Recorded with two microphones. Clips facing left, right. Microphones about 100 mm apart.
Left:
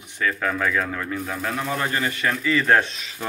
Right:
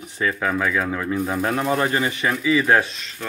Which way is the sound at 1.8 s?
20° right (ahead or behind).